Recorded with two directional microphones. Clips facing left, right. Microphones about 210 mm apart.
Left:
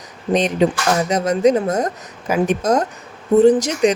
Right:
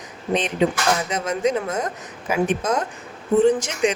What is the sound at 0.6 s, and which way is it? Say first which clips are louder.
Speech: left 4 dB; 40° left (ahead or behind).